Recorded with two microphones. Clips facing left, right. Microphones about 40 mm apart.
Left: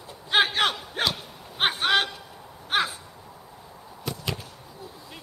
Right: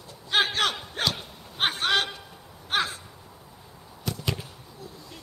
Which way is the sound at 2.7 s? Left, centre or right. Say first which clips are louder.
Left 2 dB; centre.